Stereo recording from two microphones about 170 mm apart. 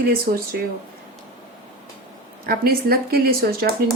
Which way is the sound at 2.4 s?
60° right (ahead or behind).